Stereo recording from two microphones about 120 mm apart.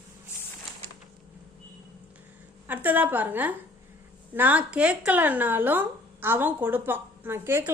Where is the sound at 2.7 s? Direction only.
15° right (ahead or behind).